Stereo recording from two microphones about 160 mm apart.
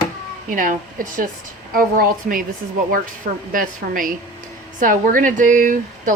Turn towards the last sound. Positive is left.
turn(degrees=-55)  # may be behind; listen again after turning